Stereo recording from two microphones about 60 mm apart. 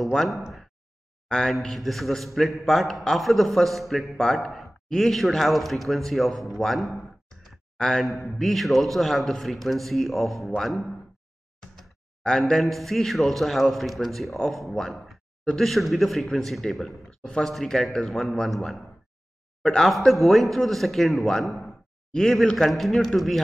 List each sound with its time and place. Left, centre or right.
0.0 s a man's voice: centre
0.4 s a sound: centre
1.3 s a man's voice: centre
12.2 s a man's voice: centre
17.2 s speech: centre
17.5 s a man's voice: centre
19.6 s speech: centre
19.9 s a man's voice: centre